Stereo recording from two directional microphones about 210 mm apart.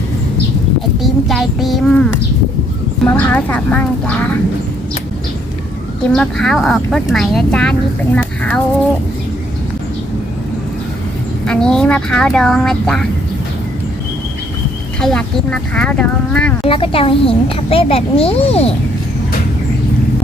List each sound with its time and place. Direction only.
0.9 s speech: centre (ahead or behind)
3.1 s speech: 10° left (ahead or behind)
6.0 s speech: 5° left (ahead or behind)
11.4 s speech: 5° left (ahead or behind)
15.0 s speech: 5° left (ahead or behind)
16.6 s a child's voice: 25° left (ahead or behind)